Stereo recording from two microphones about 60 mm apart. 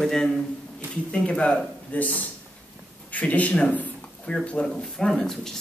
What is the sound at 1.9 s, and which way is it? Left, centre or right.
Speech, left.